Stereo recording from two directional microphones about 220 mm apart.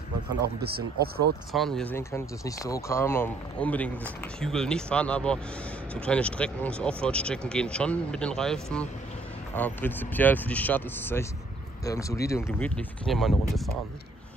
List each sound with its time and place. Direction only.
0.7 s speech: 45° right (ahead or behind)
1.5 s speech: centre (ahead or behind)